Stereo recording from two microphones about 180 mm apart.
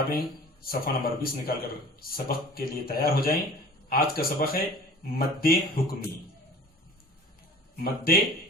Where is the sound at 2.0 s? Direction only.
55° left (ahead or behind).